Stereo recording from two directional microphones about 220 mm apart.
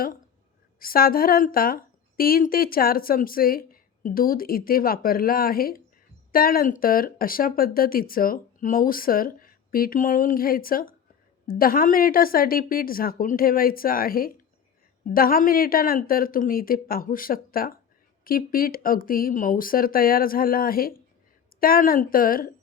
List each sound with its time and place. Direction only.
0.8 s a woman's voice: 40° left (ahead or behind)